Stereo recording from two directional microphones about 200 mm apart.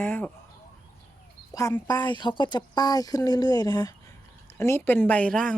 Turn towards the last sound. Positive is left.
turn(degrees=5)  # may be behind; listen again after turning